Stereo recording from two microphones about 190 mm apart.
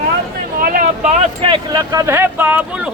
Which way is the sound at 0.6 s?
45° right (ahead or behind).